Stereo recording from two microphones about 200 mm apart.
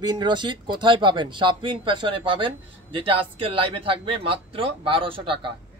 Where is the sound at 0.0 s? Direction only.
20° right (ahead or behind).